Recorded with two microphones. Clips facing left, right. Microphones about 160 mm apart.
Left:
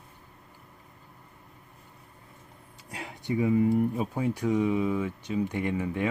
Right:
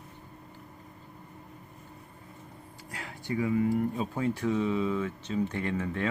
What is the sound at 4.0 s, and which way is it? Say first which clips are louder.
Speech: left 1 dB; 15° left (ahead or behind).